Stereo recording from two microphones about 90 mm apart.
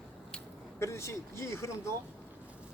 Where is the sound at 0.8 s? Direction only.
30° left (ahead or behind).